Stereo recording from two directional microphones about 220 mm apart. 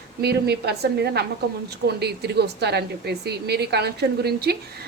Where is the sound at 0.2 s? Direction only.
45° right (ahead or behind).